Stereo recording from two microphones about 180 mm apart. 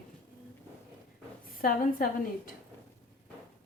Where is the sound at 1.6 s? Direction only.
55° left (ahead or behind).